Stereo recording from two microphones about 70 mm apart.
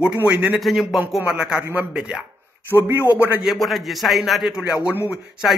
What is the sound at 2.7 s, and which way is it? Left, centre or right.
Speech, right.